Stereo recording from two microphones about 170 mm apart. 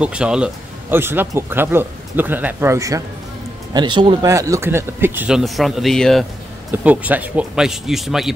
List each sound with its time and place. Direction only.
0.0 s speech: 5° right (ahead or behind); by 4.3 s 30° right (ahead or behind)
4.3 s speech: 20° right (ahead or behind); by 6.2 s centre (ahead or behind)
6.7 s speech: 10° right (ahead or behind)